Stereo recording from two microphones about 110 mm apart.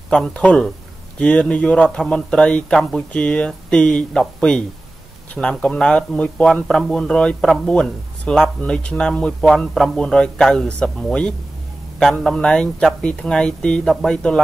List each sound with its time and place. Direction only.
0.1 s speech: 10° left (ahead or behind)